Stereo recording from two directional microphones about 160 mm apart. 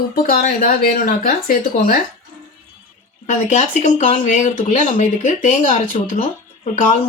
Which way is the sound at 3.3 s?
45° left (ahead or behind).